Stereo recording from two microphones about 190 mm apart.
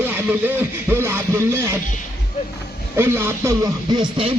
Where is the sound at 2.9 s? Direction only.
10° right (ahead or behind).